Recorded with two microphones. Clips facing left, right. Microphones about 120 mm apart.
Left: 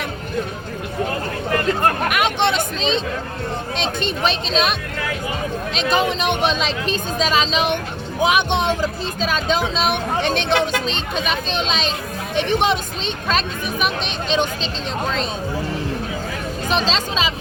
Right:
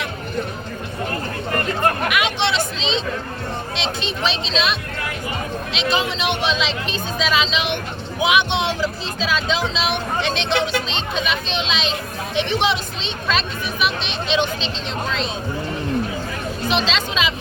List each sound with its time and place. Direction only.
2.0 s speech: 50° left (ahead or behind)
16.6 s speech: 40° left (ahead or behind)